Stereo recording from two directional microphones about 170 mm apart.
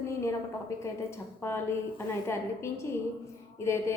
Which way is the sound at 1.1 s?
15° left (ahead or behind).